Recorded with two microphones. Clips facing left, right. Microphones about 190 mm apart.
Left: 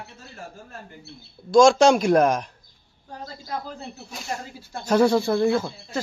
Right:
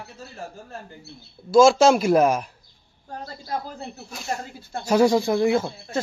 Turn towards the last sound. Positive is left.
turn(degrees=-15)  # may be behind; listen again after turning